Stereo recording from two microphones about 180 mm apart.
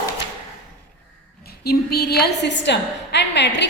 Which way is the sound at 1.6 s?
60° left (ahead or behind).